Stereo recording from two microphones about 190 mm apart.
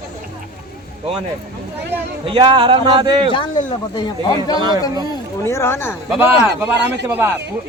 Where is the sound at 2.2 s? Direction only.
25° right (ahead or behind).